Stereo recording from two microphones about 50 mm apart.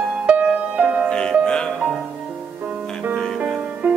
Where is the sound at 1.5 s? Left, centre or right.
Centre.